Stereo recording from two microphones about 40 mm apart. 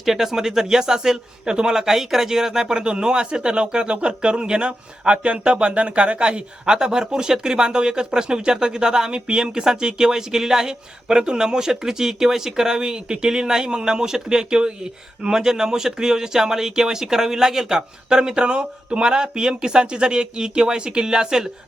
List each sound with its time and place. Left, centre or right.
0.0 s speech: centre